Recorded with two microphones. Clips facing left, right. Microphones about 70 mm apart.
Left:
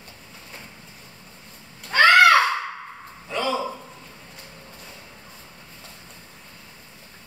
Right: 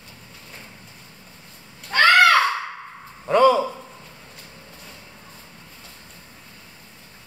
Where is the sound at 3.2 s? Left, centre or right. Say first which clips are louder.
Right 10 dB; right.